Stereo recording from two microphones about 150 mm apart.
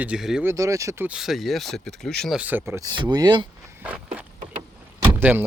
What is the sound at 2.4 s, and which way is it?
Speech, 15° right (ahead or behind).